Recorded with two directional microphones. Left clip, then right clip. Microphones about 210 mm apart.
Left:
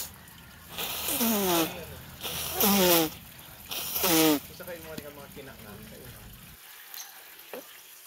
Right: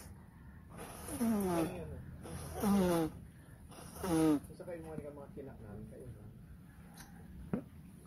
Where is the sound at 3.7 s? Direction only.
25° left (ahead or behind).